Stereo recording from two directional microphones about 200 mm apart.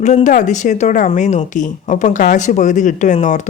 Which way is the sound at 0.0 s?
35° left (ahead or behind).